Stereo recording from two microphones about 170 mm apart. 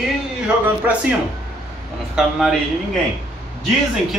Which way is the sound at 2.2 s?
Centre (ahead or behind).